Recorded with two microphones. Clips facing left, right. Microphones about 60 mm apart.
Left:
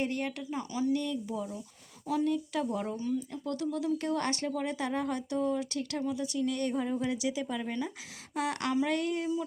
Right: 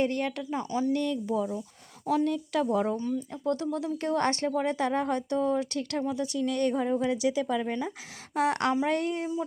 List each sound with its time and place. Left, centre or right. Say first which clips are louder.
0.0 s speech: right 5 dB; right
0.9 s speech: right 5 dB; right
2.6 s speech: right 6 dB; right
7.3 s speech: right 6 dB; right
7.6 s speech: right 4 dB; right